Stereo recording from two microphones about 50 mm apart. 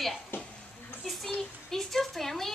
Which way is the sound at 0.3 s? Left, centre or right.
Left.